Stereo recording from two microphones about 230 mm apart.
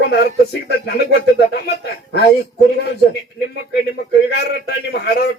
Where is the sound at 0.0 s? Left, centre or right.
Left.